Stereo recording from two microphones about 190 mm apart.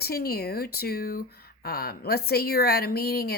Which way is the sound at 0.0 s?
55° left (ahead or behind).